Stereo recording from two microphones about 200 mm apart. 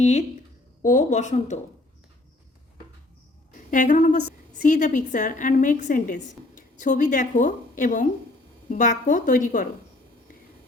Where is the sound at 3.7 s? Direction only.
40° left (ahead or behind).